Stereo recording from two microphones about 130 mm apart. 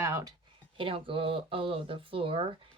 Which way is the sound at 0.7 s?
45° right (ahead or behind).